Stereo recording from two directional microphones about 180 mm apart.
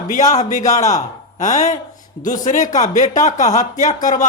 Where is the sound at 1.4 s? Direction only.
45° left (ahead or behind).